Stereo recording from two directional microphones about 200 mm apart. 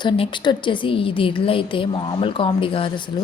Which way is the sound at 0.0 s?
25° left (ahead or behind).